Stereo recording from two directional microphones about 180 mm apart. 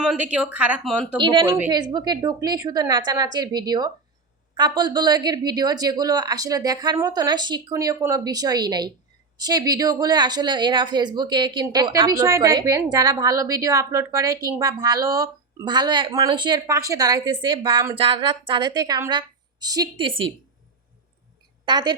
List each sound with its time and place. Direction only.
0.0 s a woman's voice: 5° right (ahead or behind)
1.1 s a woman's voice: 25° right (ahead or behind)
21.6 s a woman's voice: 25° right (ahead or behind)